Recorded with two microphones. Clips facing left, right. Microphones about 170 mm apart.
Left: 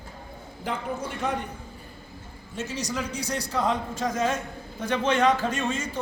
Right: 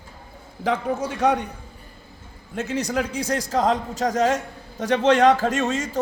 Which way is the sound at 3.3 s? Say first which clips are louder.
Right 7 dB; 90° right.